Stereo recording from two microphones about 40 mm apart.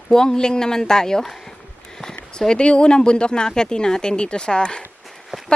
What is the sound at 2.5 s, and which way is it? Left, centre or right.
Speech, left.